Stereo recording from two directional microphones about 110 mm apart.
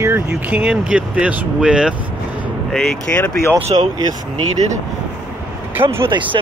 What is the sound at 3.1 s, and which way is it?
Speech, 10° left (ahead or behind).